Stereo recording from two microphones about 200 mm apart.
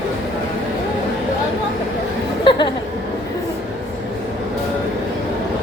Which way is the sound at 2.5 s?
25° left (ahead or behind).